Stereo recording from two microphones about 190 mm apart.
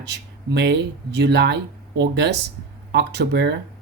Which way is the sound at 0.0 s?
65° right (ahead or behind).